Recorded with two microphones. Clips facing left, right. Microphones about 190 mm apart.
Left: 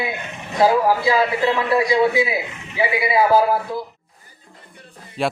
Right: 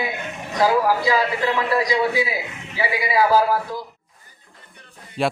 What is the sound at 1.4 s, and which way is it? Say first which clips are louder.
Speech: left 3 dB; 25° left (ahead or behind).